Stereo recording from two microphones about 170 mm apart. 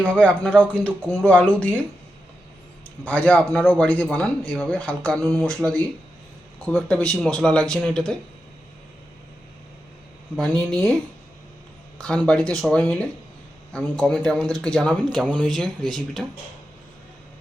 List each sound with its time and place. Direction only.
0.0 s speech: 10° left (ahead or behind)
3.0 s speech: 10° left (ahead or behind)
5.6 s speech: 20° right (ahead or behind)
6.9 s speech: 5° left (ahead or behind)
10.3 s speech: centre (ahead or behind)
11.9 s speech: 5° left (ahead or behind)